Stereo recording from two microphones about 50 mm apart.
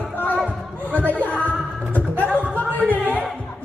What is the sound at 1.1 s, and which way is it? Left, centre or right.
Music, left.